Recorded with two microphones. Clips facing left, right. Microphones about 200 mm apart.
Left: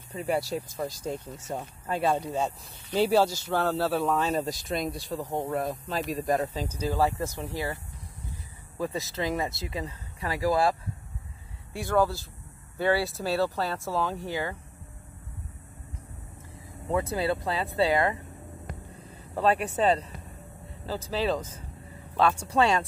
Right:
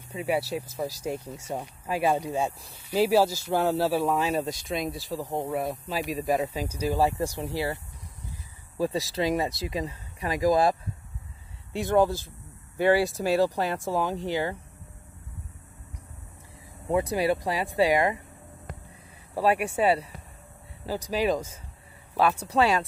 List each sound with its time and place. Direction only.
0.1 s speech: 5° right (ahead or behind)
9.1 s speech: 20° right (ahead or behind)
16.8 s speech: 15° right (ahead or behind)
19.3 s speech: 10° right (ahead or behind)